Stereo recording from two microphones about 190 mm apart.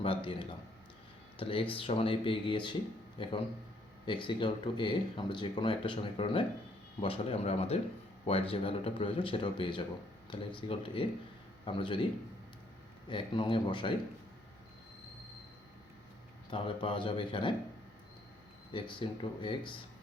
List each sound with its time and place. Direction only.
0.0 s a man's voice: 25° left (ahead or behind)
13.1 s speech: 25° left (ahead or behind)
16.5 s a man's voice: 25° left (ahead or behind)
18.7 s speech: 25° left (ahead or behind)